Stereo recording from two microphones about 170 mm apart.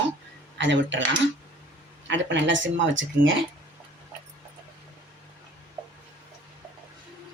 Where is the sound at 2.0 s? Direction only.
90° right.